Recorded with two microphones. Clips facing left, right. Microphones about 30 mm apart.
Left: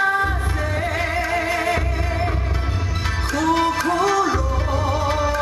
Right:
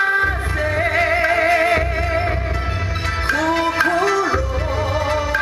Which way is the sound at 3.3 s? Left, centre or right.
Right.